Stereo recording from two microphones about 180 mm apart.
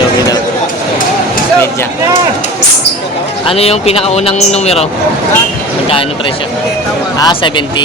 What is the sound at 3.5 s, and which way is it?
A man's voice, 35° left (ahead or behind).